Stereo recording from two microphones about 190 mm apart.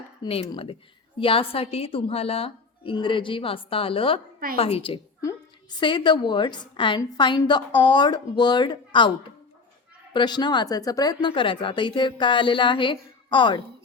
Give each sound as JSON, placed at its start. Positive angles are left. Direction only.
{"t": 0.2, "sound": "a woman's voice", "side_deg": 30}